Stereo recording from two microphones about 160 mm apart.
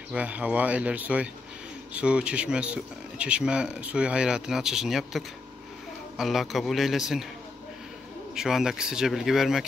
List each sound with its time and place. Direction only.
0.1 s speech: 10° right (ahead or behind)
8.4 s speech: 5° right (ahead or behind)